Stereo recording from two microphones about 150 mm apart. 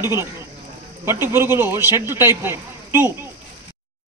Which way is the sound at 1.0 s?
15° right (ahead or behind).